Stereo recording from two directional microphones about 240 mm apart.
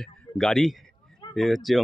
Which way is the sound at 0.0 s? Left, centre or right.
Centre.